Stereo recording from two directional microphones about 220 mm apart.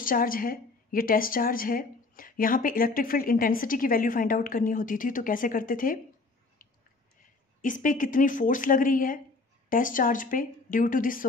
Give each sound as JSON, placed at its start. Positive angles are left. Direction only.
{"t": 0.0, "sound": "a woman's voice", "side_deg": 40}
{"t": 7.6, "sound": "a woman's voice", "side_deg": 35}